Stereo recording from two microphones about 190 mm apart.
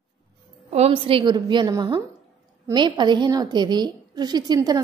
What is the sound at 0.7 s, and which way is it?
A woman's voice, 35° right (ahead or behind).